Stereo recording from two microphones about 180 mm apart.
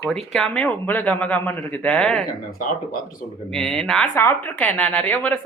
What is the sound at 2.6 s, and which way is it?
Speech, 50° left (ahead or behind).